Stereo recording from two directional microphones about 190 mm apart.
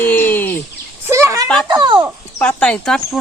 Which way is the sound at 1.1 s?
15° right (ahead or behind).